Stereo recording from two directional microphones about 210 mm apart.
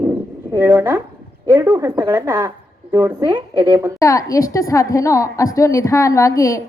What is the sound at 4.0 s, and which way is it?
A woman's voice, 15° left (ahead or behind).